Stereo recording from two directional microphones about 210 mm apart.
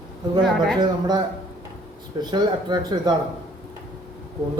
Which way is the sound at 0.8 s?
20° right (ahead or behind).